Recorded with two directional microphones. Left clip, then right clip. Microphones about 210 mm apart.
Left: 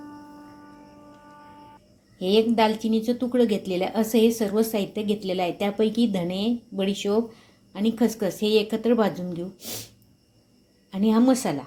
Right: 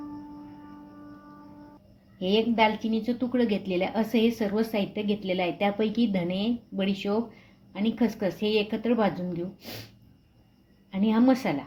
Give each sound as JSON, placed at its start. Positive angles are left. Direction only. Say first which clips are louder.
{"t": 2.1, "sound": "a woman's voice", "louder": "left 3 dB", "side_deg": 20}
{"t": 10.9, "sound": "a woman's voice", "louder": "left 3 dB", "side_deg": 20}